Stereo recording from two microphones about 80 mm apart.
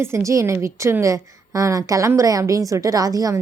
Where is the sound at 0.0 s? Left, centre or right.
Right.